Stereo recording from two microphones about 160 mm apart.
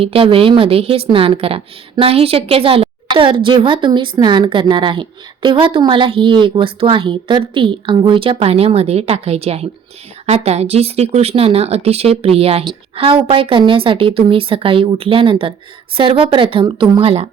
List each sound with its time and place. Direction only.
0.0 s a woman's voice: 35° right (ahead or behind)